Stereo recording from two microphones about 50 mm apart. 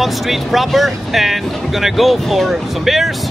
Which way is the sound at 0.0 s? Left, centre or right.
Centre.